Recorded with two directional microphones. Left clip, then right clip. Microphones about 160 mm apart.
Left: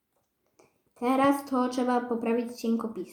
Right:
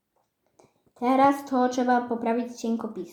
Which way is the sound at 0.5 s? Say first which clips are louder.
Right 3 dB; 5° right (ahead or behind).